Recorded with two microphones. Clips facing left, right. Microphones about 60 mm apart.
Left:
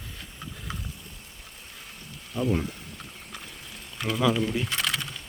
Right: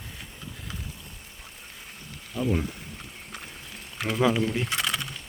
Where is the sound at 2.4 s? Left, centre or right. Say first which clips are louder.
Even; centre.